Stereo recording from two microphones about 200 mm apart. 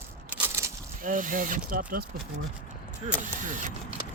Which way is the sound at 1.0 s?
40° right (ahead or behind).